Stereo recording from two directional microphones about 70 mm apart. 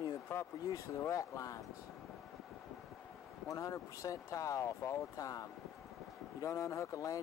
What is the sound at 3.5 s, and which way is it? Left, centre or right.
Speech, left.